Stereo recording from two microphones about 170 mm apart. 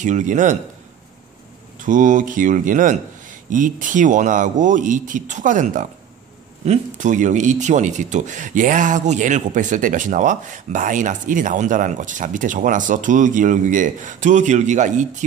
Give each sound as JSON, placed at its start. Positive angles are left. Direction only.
{"t": 0.0, "sound": "speech", "side_deg": -45}
{"t": 1.8, "sound": "speech", "side_deg": -50}